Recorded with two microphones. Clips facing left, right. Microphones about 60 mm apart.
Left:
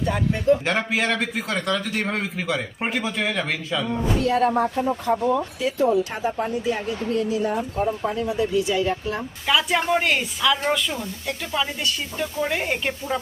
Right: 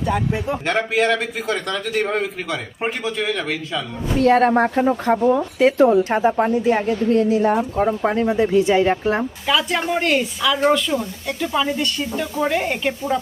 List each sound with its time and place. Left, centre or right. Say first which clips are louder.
0.0 s speech: right 1 dB; centre
4.2 s speech: right 7 dB; right
6.1 s a woman's voice: right 8 dB; right
8.0 s speech: right 6 dB; right
8.3 s a woman's voice: right 6 dB; right
9.5 s speech: even; centre